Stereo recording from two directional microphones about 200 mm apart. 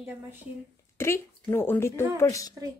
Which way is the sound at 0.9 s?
15° left (ahead or behind).